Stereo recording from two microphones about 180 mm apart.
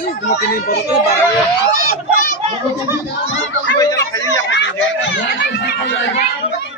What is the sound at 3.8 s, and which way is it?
Speech, 20° left (ahead or behind).